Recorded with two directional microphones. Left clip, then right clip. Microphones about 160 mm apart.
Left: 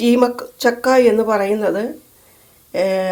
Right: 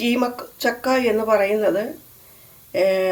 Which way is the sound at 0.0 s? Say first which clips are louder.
Left 7 dB; 35° left (ahead or behind).